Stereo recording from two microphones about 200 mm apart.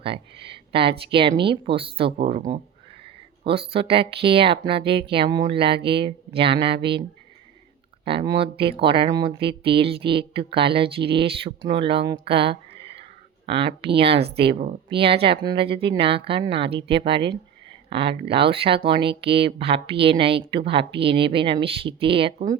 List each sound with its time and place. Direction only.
0.0 s speech: 25° right (ahead or behind)
2.2 s speech: 40° right (ahead or behind)
3.0 s speech: 25° right (ahead or behind)
8.0 s speech: 25° right (ahead or behind)
12.2 s a sound: 25° right (ahead or behind)
14.3 s speech: 30° right (ahead or behind)
14.8 s speech: 25° right (ahead or behind)